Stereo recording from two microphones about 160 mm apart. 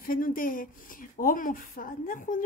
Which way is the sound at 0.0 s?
60° left (ahead or behind).